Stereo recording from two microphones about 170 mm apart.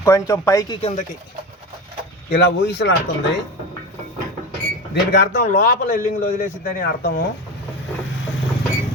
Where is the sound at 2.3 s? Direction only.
85° left.